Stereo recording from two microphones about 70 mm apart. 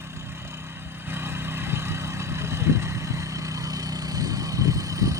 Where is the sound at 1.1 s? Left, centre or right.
Right.